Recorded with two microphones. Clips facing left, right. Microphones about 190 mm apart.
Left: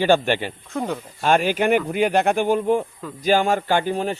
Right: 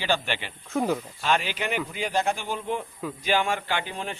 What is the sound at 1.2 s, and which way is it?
A man's voice, 50° left (ahead or behind).